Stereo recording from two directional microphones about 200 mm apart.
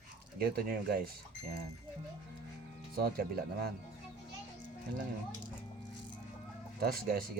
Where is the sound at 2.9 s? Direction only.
50° right (ahead or behind).